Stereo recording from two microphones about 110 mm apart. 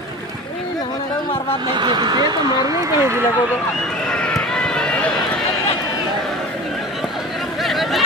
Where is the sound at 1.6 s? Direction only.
45° right (ahead or behind); by 3.3 s 25° right (ahead or behind).